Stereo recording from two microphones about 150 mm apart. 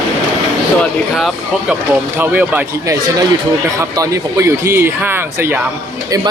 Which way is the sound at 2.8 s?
20° right (ahead or behind).